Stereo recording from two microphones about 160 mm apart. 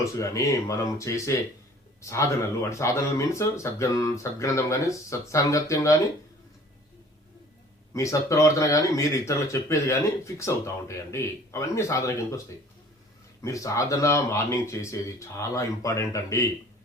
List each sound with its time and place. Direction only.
0.0 s speech: 20° left (ahead or behind)
7.9 s speech: 20° left (ahead or behind)
13.4 s speech: 20° left (ahead or behind)